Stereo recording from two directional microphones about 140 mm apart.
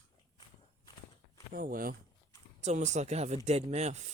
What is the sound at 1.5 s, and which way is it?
Speech, 90° right.